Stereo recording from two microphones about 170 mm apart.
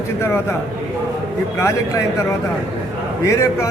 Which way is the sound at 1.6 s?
15° left (ahead or behind).